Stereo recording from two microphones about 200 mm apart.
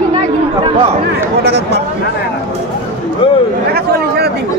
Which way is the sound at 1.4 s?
55° right (ahead or behind).